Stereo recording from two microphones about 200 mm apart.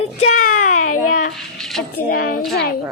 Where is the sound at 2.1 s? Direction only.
45° left (ahead or behind).